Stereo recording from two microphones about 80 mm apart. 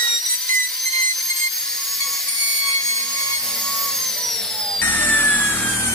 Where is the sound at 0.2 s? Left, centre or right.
Centre.